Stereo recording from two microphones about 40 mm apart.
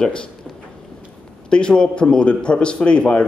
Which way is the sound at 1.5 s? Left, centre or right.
Left.